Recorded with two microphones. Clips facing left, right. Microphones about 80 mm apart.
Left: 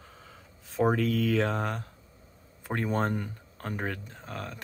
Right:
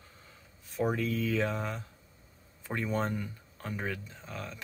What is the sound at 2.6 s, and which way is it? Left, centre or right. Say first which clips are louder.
Speech: left 3 dB; left.